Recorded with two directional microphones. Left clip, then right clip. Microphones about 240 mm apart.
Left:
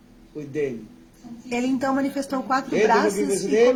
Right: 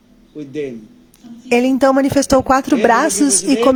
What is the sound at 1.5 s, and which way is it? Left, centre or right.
A woman's voice, right.